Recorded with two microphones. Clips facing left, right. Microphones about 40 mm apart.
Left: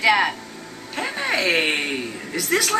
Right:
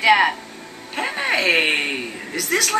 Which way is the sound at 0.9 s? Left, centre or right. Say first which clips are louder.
Right 2 dB; centre.